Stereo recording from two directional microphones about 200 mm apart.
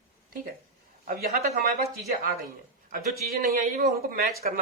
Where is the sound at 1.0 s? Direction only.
50° right (ahead or behind).